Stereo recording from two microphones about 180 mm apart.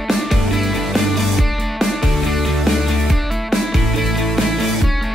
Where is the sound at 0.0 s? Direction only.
Centre (ahead or behind).